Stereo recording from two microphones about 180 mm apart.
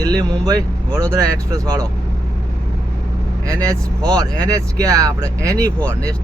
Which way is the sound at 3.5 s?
20° right (ahead or behind).